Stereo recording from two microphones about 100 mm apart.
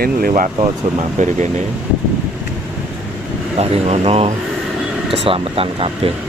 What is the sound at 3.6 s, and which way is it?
Speech, 90° right.